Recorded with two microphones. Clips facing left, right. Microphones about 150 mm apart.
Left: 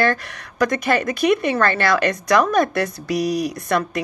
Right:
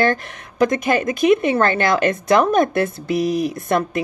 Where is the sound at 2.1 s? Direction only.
50° right (ahead or behind).